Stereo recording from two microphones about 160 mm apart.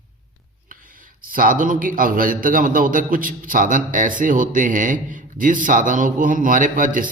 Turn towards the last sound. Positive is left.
turn(degrees=-55)  # may be behind; listen again after turning